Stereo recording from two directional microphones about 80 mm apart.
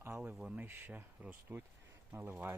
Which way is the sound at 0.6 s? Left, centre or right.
Right.